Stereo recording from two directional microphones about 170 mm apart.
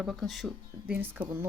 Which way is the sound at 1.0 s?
10° right (ahead or behind).